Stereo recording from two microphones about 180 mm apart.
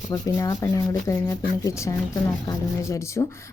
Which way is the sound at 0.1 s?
20° left (ahead or behind).